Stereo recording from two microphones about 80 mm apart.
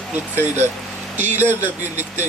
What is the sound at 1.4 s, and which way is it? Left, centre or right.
Speech, right.